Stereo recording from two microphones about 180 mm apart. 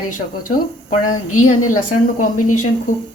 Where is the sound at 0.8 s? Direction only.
45° left (ahead or behind).